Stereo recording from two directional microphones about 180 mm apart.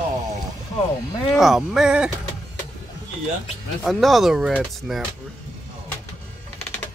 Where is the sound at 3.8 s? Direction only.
Centre (ahead or behind).